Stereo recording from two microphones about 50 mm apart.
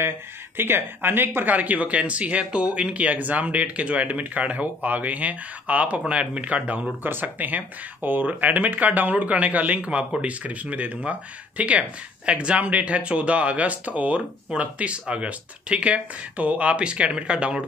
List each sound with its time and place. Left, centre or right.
0.6 s speech: right
7.0 s speech: right